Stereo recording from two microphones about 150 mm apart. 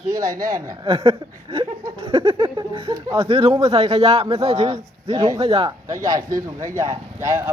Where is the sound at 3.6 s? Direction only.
45° right (ahead or behind).